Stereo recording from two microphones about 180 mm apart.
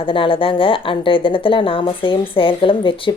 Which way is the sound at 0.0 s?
30° left (ahead or behind).